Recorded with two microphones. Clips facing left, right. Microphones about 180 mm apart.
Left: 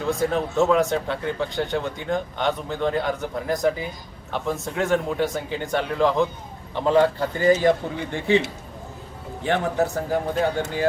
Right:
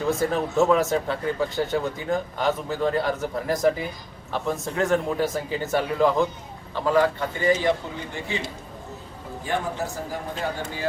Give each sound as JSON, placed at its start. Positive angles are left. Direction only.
{"t": 0.1, "sound": "speech", "side_deg": 0}
{"t": 6.7, "sound": "speech", "side_deg": 25}
{"t": 9.4, "sound": "speech", "side_deg": 65}